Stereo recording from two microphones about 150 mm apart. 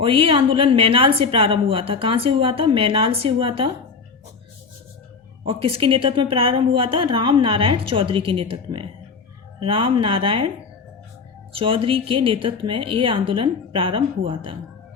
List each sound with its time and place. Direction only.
0.0 s a woman's voice: 35° right (ahead or behind)
5.5 s a woman's voice: 40° right (ahead or behind)
11.5 s a woman's voice: 35° right (ahead or behind)